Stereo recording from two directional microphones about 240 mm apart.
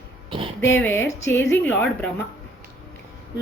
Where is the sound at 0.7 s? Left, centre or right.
Centre.